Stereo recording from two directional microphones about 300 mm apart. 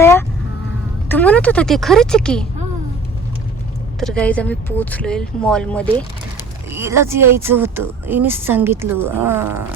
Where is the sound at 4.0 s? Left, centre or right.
Centre.